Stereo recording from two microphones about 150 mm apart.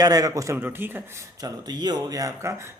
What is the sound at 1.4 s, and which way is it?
Speech, 25° right (ahead or behind).